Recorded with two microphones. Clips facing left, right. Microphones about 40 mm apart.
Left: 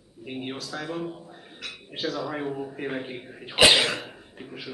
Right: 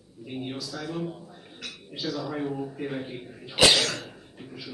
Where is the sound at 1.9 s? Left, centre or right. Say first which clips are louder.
Left 1 dB; left.